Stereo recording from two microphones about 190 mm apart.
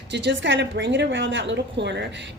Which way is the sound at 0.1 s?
65° right (ahead or behind).